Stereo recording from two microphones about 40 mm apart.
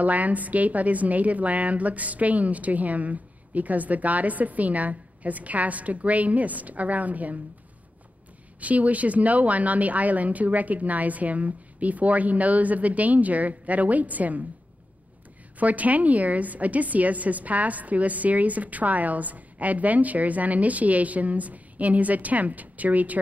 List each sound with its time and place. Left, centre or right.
0.0 s a woman's voice: right
8.5 s a woman's voice: right
15.6 s a woman's voice: right